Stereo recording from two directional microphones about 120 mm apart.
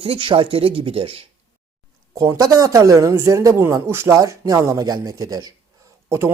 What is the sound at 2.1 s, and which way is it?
Speech, 30° right (ahead or behind).